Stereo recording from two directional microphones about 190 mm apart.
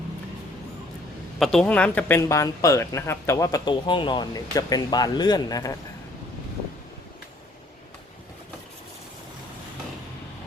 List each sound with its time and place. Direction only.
1.4 s speech: 5° left (ahead or behind); by 5.7 s 20° left (ahead or behind)